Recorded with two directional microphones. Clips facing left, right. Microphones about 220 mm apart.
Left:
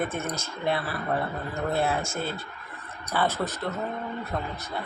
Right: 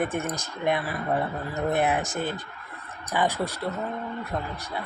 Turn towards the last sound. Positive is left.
turn(degrees=-15)  # may be behind; listen again after turning